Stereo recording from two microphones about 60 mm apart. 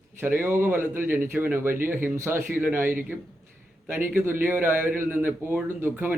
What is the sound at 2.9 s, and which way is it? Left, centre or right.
Speech, right.